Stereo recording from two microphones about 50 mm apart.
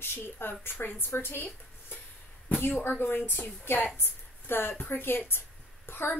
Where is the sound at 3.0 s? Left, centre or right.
Left.